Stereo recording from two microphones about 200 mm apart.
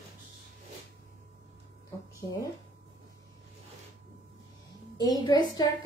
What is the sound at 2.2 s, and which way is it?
Speech, 20° left (ahead or behind).